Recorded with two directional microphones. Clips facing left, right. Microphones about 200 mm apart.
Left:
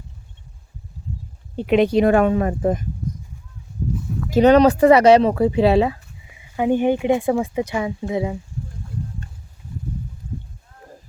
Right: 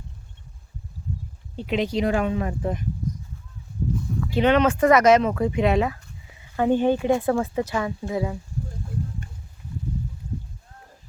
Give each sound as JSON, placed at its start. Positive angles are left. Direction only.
{"t": 1.5, "sound": "speech", "side_deg": 60}
{"t": 4.3, "sound": "speech", "side_deg": 40}
{"t": 6.3, "sound": "speech", "side_deg": 15}